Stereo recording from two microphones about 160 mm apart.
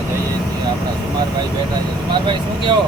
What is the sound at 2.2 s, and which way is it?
Speech, 30° right (ahead or behind).